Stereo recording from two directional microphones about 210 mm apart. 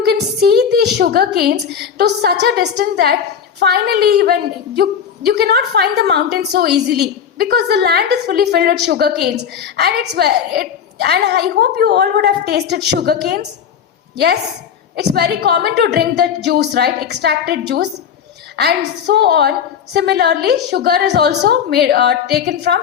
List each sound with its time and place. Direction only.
0.0 s a woman's voice: 50° right (ahead or behind)
14.9 s a woman's voice: 50° right (ahead or behind)